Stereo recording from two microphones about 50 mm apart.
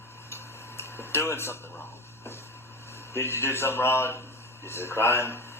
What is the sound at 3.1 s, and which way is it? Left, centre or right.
A man's voice, left.